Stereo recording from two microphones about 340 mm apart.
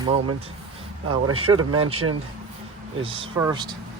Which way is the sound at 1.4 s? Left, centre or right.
Right.